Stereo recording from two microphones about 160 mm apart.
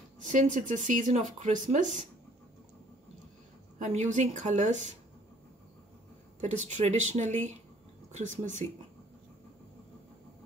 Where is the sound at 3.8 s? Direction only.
45° right (ahead or behind).